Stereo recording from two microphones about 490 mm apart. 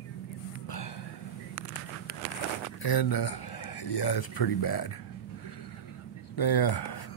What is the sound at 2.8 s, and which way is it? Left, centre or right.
Speech, left.